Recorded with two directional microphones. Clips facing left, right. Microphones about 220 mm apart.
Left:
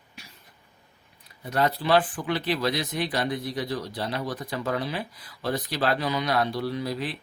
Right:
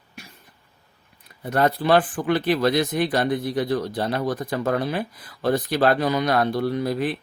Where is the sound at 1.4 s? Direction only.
50° right (ahead or behind).